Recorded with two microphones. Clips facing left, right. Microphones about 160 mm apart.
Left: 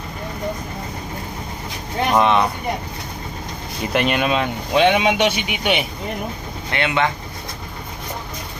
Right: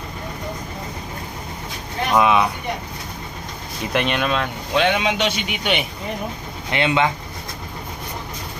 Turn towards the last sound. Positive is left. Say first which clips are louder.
# right 1 dB
turn(degrees=-20)  # may be behind; listen again after turning